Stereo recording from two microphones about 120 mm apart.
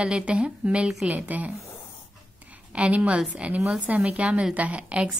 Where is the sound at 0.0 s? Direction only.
10° right (ahead or behind).